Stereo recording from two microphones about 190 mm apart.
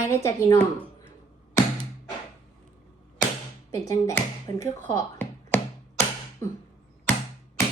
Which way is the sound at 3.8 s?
15° left (ahead or behind).